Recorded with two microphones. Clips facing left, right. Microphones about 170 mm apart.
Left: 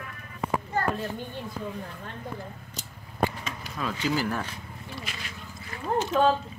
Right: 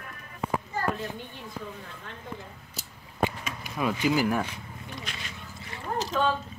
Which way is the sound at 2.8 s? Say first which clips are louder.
Left 1 dB; 15° right (ahead or behind).